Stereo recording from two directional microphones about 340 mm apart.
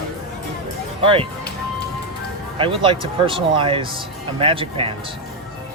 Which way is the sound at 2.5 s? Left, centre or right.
Centre.